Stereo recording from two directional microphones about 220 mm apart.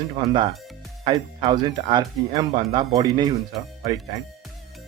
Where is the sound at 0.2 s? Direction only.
20° right (ahead or behind).